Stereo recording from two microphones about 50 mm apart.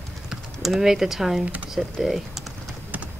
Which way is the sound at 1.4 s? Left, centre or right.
Right.